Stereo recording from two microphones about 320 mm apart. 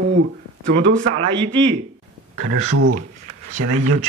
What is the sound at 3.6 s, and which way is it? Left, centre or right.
Speech, right.